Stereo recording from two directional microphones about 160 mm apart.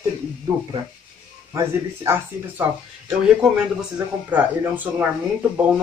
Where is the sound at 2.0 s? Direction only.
10° right (ahead or behind).